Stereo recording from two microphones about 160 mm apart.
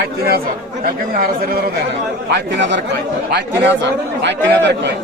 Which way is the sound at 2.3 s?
90° right.